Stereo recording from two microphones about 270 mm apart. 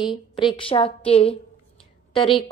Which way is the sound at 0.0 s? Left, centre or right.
Centre.